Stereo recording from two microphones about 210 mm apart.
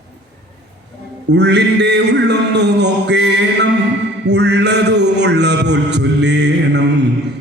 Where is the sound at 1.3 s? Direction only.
55° right (ahead or behind).